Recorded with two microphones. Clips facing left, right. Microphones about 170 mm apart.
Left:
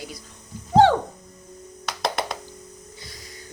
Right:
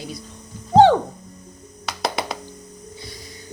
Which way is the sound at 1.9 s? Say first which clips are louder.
Right 1 dB; 5° right (ahead or behind).